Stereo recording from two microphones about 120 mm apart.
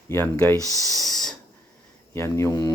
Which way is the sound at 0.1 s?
15° left (ahead or behind).